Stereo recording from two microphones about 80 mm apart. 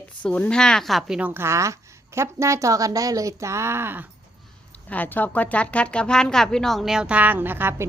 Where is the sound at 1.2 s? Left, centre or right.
Right.